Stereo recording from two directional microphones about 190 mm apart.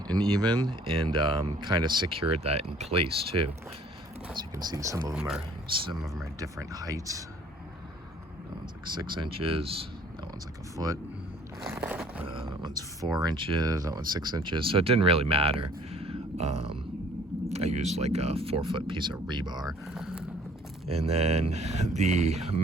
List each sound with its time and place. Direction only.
0.1 s speech: 20° right (ahead or behind)
4.4 s speech: 20° right (ahead or behind)
6.4 s speech: 20° right (ahead or behind)
9.0 s speech: 25° right (ahead or behind)
11.7 s a sound: 10° right (ahead or behind)
12.2 s a sound: 25° right (ahead or behind)
13.1 s speech: 25° right (ahead or behind)
15.9 s a sound: 30° right (ahead or behind)
17.5 s speech: 35° right (ahead or behind)
19.6 s speech: 5° right (ahead or behind)
20.8 s speech: 30° right (ahead or behind)